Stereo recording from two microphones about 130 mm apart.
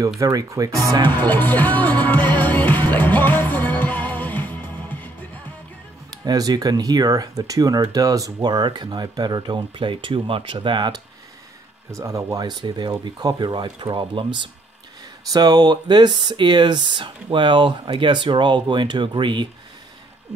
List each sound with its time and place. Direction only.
0.2 s speech: 25° right (ahead or behind)
1.0 s music: 15° left (ahead or behind)
6.0 s speech: 30° right (ahead or behind)
11.9 s speech: 25° right (ahead or behind)